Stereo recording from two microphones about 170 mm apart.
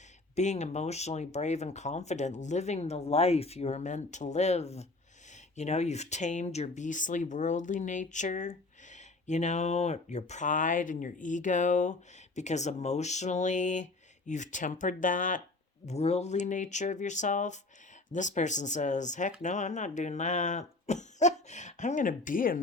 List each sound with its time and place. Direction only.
0.3 s speech: 40° left (ahead or behind)
15.9 s speech: 40° left (ahead or behind)